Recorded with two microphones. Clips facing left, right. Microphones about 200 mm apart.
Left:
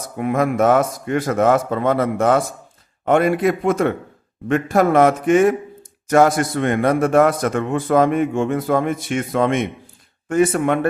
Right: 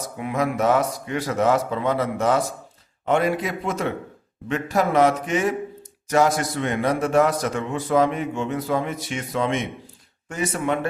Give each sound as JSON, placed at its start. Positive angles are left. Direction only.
{"t": 0.2, "sound": "a man's voice", "side_deg": 50}